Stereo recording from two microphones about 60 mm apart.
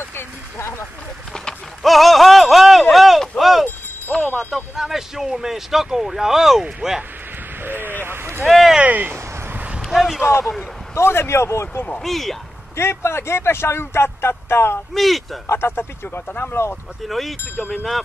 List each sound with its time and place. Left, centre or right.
0.0 s a sound: left
1.8 s a sound: centre
4.1 s speech: centre
7.6 s a sound: right
8.5 s speech: centre
8.8 s speech: right
9.8 s a sound: centre
11.0 s speech: left
12.0 s speech: centre
12.7 s speech: left
15.0 s speech: centre
15.4 s speech: left
17.1 s speech: centre